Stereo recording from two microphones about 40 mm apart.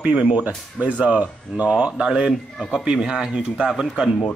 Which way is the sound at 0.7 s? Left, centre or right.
Right.